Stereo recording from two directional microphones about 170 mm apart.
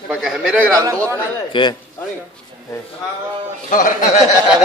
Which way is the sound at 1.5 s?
30° left (ahead or behind).